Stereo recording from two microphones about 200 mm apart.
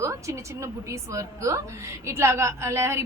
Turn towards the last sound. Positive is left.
turn(degrees=-10)  # may be behind; listen again after turning